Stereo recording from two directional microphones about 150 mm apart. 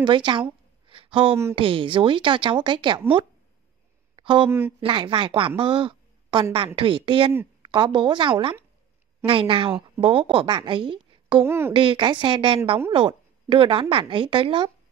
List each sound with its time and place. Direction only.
0.0 s a sound: 30° right (ahead or behind)
1.5 s a woman's voice: 35° right (ahead or behind)
4.2 s a sound: 35° right (ahead or behind)
4.5 s speech: 15° right (ahead or behind)
4.7 s a woman's voice: 35° right (ahead or behind)
5.6 s a sound: 35° right (ahead or behind)
6.5 s a woman's voice: 35° right (ahead or behind)
11.4 s speech: 15° right (ahead or behind)
11.7 s a woman's voice: 35° right (ahead or behind)